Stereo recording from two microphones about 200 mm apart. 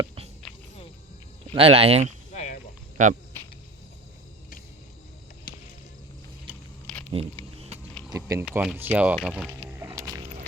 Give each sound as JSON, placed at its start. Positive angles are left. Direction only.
{"t": 1.5, "sound": "speech", "side_deg": -30}
{"t": 2.3, "sound": "a sound", "side_deg": 35}
{"t": 3.0, "sound": "speech", "side_deg": -40}
{"t": 5.5, "sound": "music", "side_deg": 50}
{"t": 8.1, "sound": "speech", "side_deg": -15}
{"t": 9.5, "sound": "music", "side_deg": -15}